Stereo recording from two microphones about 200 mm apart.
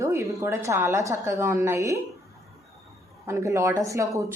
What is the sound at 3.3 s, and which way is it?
A woman's voice, 15° right (ahead or behind).